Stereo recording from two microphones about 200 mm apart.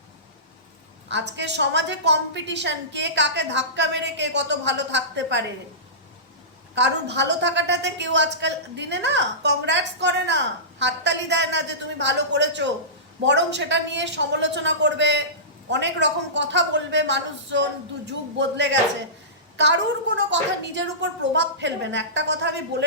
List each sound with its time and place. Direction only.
1.0 s a woman's voice: 60° right (ahead or behind)
6.7 s a woman's voice: 60° right (ahead or behind)